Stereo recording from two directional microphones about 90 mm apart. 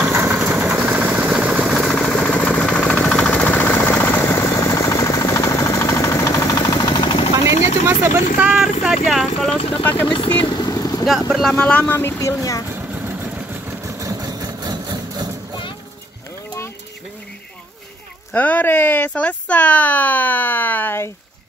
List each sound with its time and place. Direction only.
0.0 s vehicle: 10° right (ahead or behind)
2.0 s a sound: 10° left (ahead or behind); by 6.9 s 40° left (ahead or behind)
6.9 s a sound: 75° left (ahead or behind)
7.4 s vehicle: 30° right (ahead or behind)
8.4 s vehicle: 5° right (ahead or behind)
9.6 s speech: 90° left
9.8 s speech: 25° left (ahead or behind)
10.1 s vehicle: 65° left (ahead or behind); by 11.1 s 45° left (ahead or behind)
11.1 s speech: 5° right (ahead or behind)
11.5 s speech: 15° left (ahead or behind)
12.0 s speech: 30° left (ahead or behind)
12.7 s vehicle: 25° right (ahead or behind)
13.8 s engine: 40° right (ahead or behind)
18.3 s speech: 20° left (ahead or behind)